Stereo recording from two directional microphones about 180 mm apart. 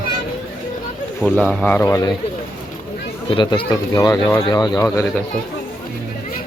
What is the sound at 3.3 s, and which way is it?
Speech, 25° left (ahead or behind).